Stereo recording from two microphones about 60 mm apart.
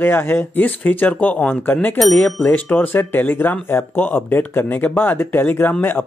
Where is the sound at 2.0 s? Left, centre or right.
Centre.